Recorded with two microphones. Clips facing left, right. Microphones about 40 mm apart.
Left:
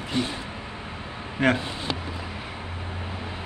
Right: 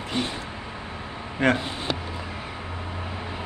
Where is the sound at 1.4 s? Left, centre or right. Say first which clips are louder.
Even; centre.